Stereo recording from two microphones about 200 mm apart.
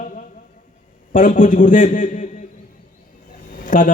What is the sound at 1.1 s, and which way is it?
A man's voice, 40° left (ahead or behind).